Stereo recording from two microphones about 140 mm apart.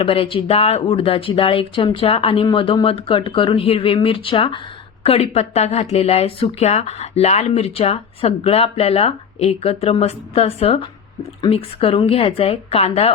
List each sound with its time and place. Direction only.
0.0 s speech: 40° left (ahead or behind)